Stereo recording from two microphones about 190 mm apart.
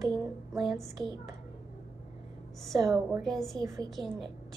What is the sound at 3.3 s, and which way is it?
Speech, centre (ahead or behind).